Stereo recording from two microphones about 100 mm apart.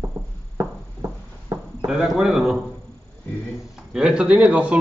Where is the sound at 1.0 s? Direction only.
40° right (ahead or behind).